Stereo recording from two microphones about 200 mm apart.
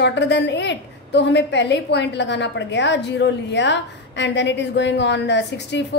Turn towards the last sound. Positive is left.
turn(degrees=60)  # may be behind; listen again after turning